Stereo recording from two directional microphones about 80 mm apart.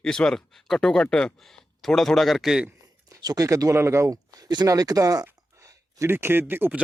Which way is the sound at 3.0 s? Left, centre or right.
Right.